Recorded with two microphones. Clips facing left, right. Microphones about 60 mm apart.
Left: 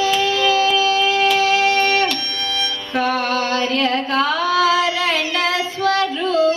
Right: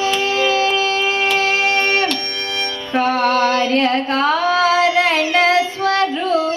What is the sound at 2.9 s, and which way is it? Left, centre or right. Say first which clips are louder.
Carnatic music: right 4 dB; right.